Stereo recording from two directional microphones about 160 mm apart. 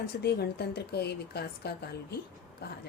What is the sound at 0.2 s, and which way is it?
A woman's voice, 90° left.